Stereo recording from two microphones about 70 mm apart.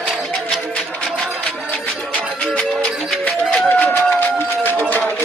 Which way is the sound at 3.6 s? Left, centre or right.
Left.